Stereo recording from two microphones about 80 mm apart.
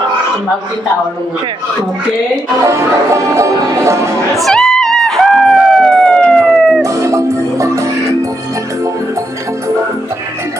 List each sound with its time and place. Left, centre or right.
2.6 s speech: right
4.4 s music: centre
6.8 s music: right